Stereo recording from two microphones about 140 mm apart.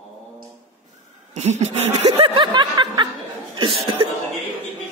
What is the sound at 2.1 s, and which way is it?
Speech, 40° right (ahead or behind).